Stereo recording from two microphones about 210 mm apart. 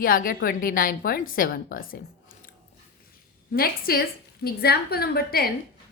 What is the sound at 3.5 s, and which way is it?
A woman's voice, 45° left (ahead or behind).